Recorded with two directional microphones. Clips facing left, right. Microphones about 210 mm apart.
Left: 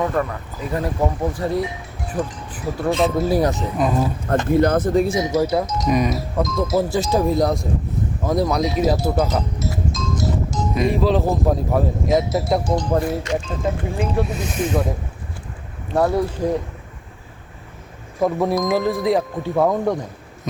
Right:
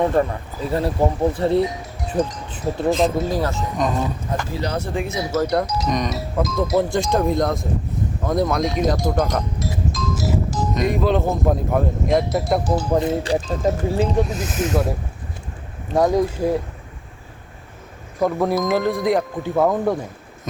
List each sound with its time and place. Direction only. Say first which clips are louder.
0.0 s speech: right 3 dB; 30° right (ahead or behind)
2.5 s a sound: right 2 dB; 25° right (ahead or behind)
2.9 s speech: left 2 dB; centre (ahead or behind)
3.3 s speech: left 4 dB; 15° left (ahead or behind)
3.8 s speech: left 2 dB; 5° left (ahead or behind)
4.4 s speech: left 9 dB; 55° left (ahead or behind)
5.2 s speech: left 1 dB; 10° left (ahead or behind); by 13.0 s 5° right (ahead or behind)
13.0 s speech: right 2 dB; 25° right (ahead or behind)
13.3 s speech: right 2 dB; 35° right (ahead or behind)
14.2 s speech: right 1 dB; centre (ahead or behind)
16.0 s speech: right 1 dB; 15° right (ahead or behind)
18.2 s speech: even; centre (ahead or behind)